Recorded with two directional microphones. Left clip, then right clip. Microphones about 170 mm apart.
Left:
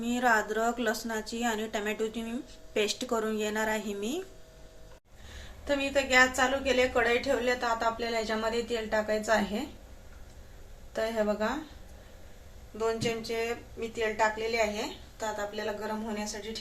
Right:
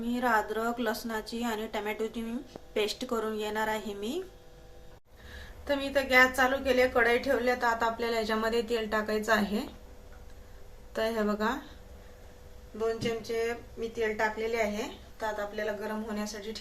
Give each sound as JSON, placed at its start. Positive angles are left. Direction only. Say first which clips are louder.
{"t": 0.1, "sound": "a woman's voice", "louder": "left 2 dB", "side_deg": 10}
{"t": 5.6, "sound": "a woman's voice", "louder": "left 1 dB", "side_deg": 10}
{"t": 10.9, "sound": "a woman's voice", "louder": "left 1 dB", "side_deg": 0}
{"t": 12.8, "sound": "a woman's voice", "louder": "left 1 dB", "side_deg": 15}
{"t": 15.2, "sound": "a woman's voice", "louder": "right 1 dB", "side_deg": 20}
{"t": 16.1, "sound": "a woman's voice", "louder": "left 1 dB", "side_deg": 5}